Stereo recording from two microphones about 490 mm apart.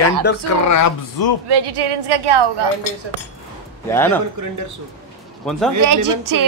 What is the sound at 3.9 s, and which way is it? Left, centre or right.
Speech, centre.